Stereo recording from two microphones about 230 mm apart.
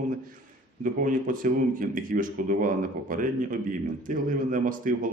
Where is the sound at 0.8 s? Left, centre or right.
Right.